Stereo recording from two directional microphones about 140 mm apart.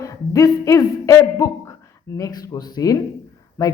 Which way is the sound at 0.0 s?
25° left (ahead or behind).